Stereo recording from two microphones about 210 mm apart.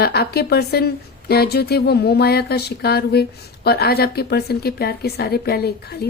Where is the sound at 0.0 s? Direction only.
50° left (ahead or behind).